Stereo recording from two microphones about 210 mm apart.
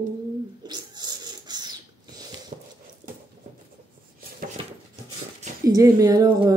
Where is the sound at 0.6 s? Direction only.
20° right (ahead or behind).